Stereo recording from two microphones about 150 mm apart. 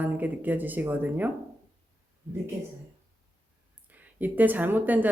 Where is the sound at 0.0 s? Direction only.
10° right (ahead or behind).